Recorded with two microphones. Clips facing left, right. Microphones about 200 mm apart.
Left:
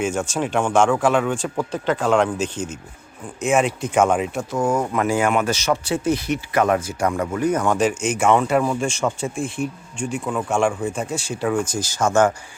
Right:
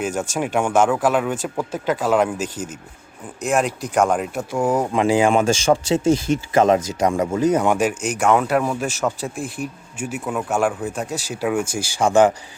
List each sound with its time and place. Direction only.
0.0 s speech: 5° right (ahead or behind)
4.5 s speech: 15° right (ahead or behind)
7.8 s speech: 5° right (ahead or behind)